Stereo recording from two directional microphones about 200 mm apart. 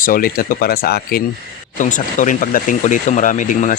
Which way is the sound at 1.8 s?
40° left (ahead or behind).